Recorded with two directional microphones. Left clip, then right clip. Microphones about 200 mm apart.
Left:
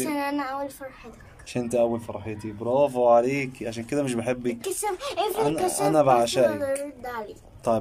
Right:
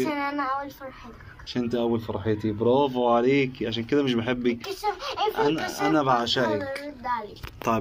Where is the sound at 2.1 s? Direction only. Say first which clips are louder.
Right 7 dB; 5° left (ahead or behind).